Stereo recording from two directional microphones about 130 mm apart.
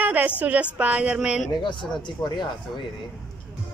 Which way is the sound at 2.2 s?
35° left (ahead or behind).